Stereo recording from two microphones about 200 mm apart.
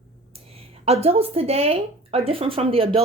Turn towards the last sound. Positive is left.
turn(degrees=-30)  # may be behind; listen again after turning